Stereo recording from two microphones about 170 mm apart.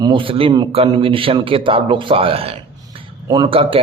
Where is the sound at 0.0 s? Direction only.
30° right (ahead or behind).